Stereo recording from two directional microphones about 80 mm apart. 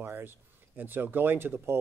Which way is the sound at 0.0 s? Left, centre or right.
Right.